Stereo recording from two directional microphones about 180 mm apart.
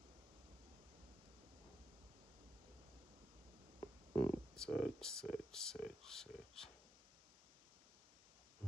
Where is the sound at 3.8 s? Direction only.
25° left (ahead or behind).